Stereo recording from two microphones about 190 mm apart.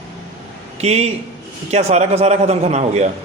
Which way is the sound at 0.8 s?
35° right (ahead or behind).